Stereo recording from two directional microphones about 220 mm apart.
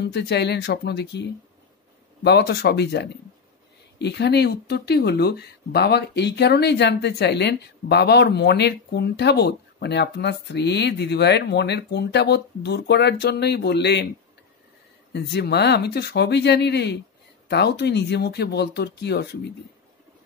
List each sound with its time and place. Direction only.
0.0 s speech: 50° left (ahead or behind)
15.1 s speech: 50° left (ahead or behind)